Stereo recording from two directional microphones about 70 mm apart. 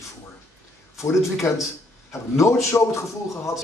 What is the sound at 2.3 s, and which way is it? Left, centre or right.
Speech, left.